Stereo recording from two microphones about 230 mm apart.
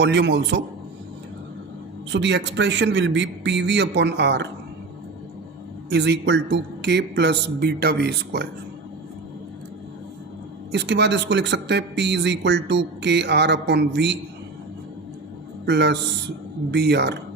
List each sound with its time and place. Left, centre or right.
0.0 s speech: right
2.0 s speech: right
5.9 s speech: right
10.7 s speech: right
15.6 s speech: right